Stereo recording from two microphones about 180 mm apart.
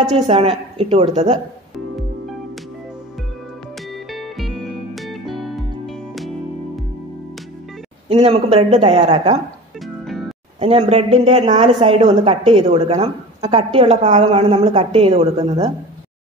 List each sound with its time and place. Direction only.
0.1 s a woman's voice: 35° right (ahead or behind)
3.9 s music: centre (ahead or behind)
8.1 s a woman's voice: 35° right (ahead or behind)
10.0 s music: centre (ahead or behind)
10.6 s a woman's voice: 35° right (ahead or behind)